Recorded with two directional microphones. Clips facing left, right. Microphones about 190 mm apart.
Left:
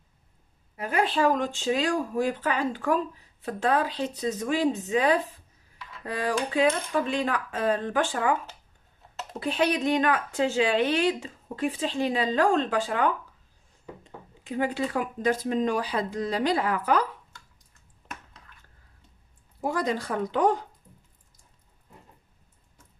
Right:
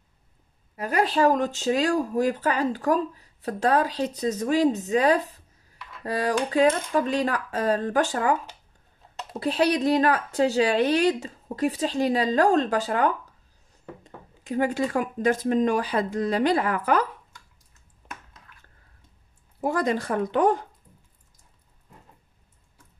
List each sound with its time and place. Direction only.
0.7 s speech: 40° right (ahead or behind)
9.4 s speech: 35° right (ahead or behind)
14.4 s speech: 45° right (ahead or behind)
19.6 s speech: 55° right (ahead or behind)